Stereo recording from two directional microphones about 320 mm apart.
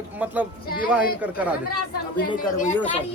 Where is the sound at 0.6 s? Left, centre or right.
Left.